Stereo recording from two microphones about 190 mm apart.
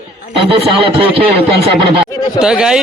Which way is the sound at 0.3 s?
30° right (ahead or behind).